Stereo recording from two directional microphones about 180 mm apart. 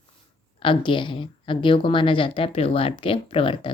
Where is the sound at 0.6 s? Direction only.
25° left (ahead or behind).